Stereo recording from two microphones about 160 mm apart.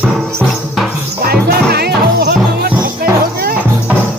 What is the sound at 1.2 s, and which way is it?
Music, 80° right.